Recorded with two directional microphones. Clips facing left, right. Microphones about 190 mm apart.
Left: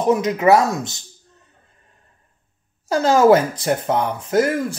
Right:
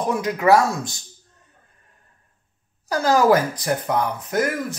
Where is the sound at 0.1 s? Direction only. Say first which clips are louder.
Left 3 dB; 20° left (ahead or behind).